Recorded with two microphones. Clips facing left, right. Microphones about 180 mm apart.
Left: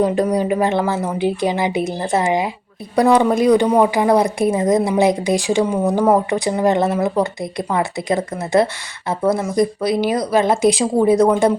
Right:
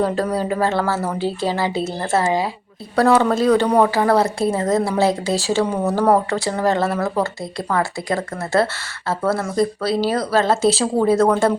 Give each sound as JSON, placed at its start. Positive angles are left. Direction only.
{"t": 0.0, "sound": "speech", "side_deg": 15}